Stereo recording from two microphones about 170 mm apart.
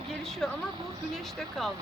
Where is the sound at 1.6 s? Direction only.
Centre (ahead or behind).